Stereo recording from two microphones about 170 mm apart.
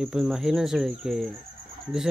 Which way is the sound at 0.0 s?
5° right (ahead or behind).